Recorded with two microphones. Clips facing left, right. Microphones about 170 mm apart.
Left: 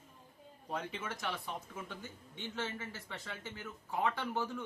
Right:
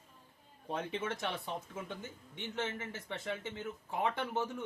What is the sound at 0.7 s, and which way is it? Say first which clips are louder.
Speech: right 3 dB; 25° right (ahead or behind).